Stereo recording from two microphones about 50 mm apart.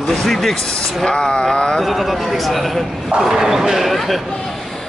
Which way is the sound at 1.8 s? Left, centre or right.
Centre.